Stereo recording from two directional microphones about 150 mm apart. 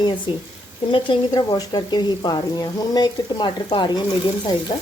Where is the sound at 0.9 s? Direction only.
35° left (ahead or behind).